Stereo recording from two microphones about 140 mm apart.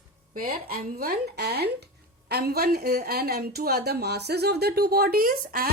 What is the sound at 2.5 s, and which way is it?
Speech, 90° right.